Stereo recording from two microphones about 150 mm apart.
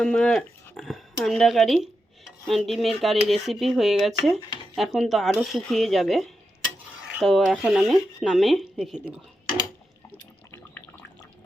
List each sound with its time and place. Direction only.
0.0 s speech: 5° left (ahead or behind)
10.1 s water: 15° left (ahead or behind)